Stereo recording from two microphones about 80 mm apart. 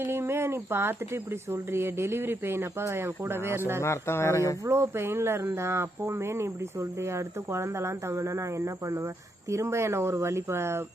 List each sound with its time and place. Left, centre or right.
0.0 s speech: right
3.8 s speech: left
4.6 s speech: right